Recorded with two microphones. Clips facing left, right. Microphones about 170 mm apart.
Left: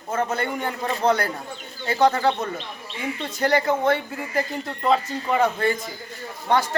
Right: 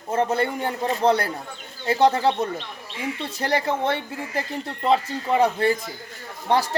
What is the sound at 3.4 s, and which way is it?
A man's voice, 30° right (ahead or behind).